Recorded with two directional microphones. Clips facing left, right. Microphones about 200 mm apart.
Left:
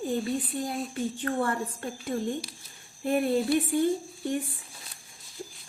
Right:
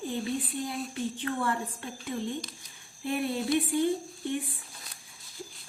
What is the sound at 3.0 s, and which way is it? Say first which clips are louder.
Speech: left 5 dB; 45° left (ahead or behind).